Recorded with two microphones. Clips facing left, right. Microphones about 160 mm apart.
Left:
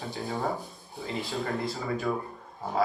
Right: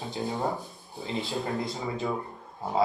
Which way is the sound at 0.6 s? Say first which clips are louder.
Even; 20° right (ahead or behind).